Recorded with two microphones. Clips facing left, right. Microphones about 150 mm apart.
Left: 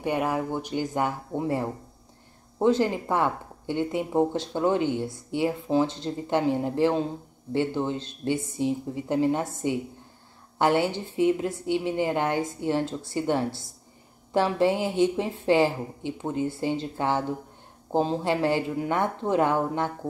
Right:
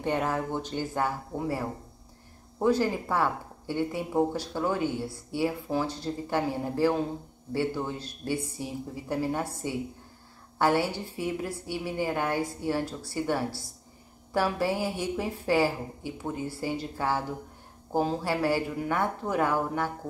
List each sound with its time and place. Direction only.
0.0 s speech: 10° left (ahead or behind)